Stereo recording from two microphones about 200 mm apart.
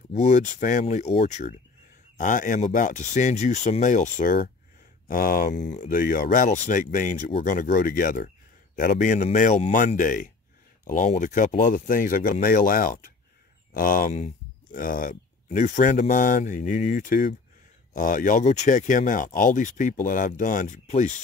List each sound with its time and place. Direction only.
0.2 s speech: 40° left (ahead or behind)